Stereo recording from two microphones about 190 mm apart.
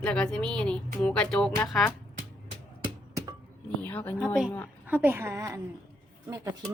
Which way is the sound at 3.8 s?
10° left (ahead or behind).